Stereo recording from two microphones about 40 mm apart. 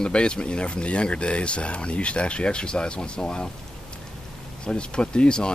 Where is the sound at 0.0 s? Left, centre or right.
Left.